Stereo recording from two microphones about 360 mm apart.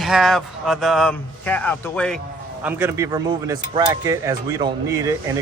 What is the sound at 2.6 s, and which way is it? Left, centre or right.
Speech, centre.